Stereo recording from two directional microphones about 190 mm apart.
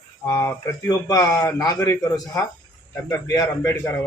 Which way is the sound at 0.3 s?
20° left (ahead or behind).